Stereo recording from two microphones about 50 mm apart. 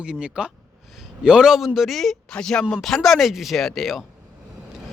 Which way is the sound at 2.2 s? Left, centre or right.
Centre.